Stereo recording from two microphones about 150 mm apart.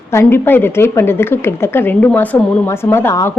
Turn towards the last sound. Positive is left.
turn(degrees=15)  # may be behind; listen again after turning